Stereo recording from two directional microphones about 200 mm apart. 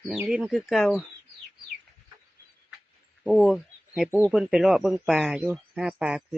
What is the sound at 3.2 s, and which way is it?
Speech, centre (ahead or behind).